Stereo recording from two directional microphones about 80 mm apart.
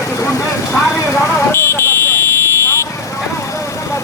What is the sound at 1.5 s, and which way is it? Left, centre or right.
Vehicle, left.